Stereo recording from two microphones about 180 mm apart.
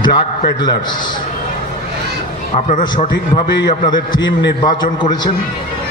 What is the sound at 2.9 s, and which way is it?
A man's voice, 25° left (ahead or behind).